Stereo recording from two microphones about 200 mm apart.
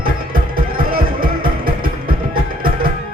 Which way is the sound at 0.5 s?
45° right (ahead or behind).